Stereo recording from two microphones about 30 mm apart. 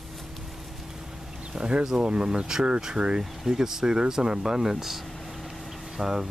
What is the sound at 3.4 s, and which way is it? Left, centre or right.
Speech, centre.